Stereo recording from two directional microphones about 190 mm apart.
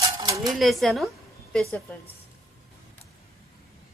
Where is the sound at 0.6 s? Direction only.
Centre (ahead or behind).